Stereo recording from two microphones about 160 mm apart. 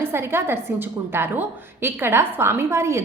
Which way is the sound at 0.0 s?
15° right (ahead or behind).